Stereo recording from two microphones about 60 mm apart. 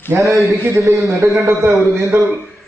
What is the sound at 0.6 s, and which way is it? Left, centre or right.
A man's voice, right.